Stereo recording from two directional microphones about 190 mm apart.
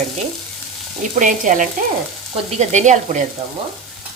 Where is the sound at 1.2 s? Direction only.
45° right (ahead or behind).